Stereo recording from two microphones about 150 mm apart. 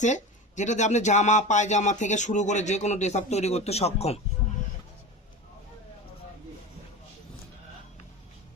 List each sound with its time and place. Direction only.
0.0 s speech: 55° left (ahead or behind)